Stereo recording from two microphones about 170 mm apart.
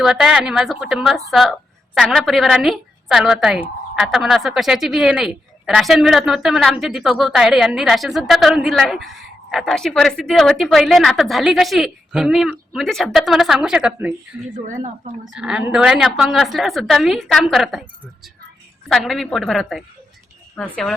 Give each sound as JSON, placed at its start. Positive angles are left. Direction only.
{"t": 0.0, "sound": "a woman's voice", "side_deg": -5}
{"t": 14.5, "sound": "a woman's voice", "side_deg": -45}
{"t": 15.3, "sound": "a woman's voice", "side_deg": -5}